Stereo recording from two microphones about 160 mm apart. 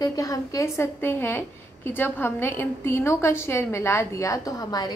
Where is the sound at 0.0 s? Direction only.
20° left (ahead or behind).